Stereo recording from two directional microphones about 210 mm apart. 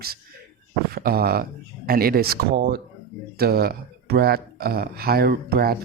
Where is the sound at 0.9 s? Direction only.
45° right (ahead or behind).